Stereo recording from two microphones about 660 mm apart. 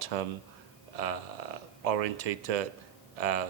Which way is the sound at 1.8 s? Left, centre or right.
Right.